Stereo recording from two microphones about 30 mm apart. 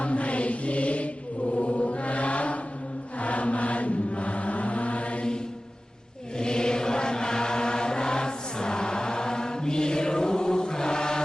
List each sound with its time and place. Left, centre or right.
0.0 s music: left
1.5 s mantra: left
3.2 s chant: left
6.4 s chant: left